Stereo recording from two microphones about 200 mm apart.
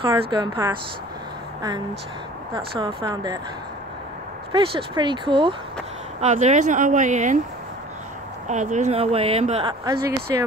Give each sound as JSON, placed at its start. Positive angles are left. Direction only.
{"t": 0.0, "sound": "speech", "side_deg": -25}
{"t": 2.5, "sound": "speech", "side_deg": -25}
{"t": 4.5, "sound": "speech", "side_deg": -25}
{"t": 6.2, "sound": "speech", "side_deg": -35}
{"t": 8.5, "sound": "speech", "side_deg": -35}